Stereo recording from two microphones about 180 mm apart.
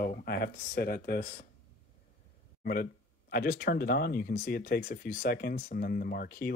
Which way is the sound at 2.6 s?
55° left (ahead or behind).